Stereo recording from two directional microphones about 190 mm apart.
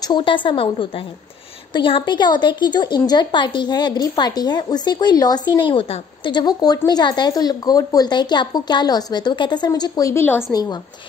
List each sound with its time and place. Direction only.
0.0 s a woman's voice: 25° left (ahead or behind)